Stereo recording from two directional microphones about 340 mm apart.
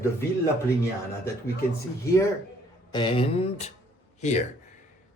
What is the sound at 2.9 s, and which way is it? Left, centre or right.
Speech, centre.